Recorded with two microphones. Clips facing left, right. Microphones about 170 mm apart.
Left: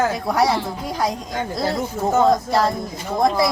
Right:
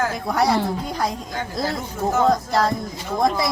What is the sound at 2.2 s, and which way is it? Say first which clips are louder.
Speech: even; centre (ahead or behind).